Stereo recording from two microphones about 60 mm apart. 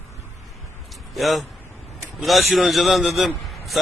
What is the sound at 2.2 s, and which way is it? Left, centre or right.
A man's voice, centre.